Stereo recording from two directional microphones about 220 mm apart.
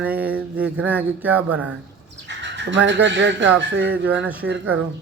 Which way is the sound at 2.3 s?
55° right (ahead or behind).